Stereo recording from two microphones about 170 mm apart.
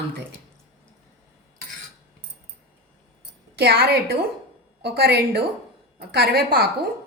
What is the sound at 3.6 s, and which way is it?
A woman's voice, 65° right (ahead or behind).